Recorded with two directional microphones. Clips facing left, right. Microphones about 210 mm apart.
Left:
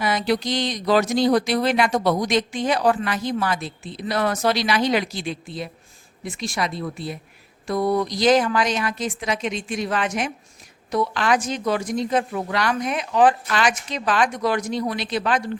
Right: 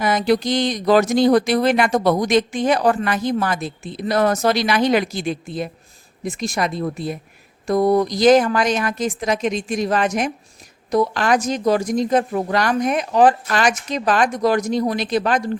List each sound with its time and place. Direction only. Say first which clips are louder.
0.0 s speech: right 4 dB; 45° right (ahead or behind)